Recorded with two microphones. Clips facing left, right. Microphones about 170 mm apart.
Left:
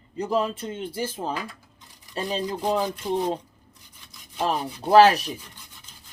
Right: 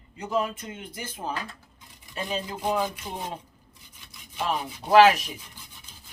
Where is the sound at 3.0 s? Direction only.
10° left (ahead or behind).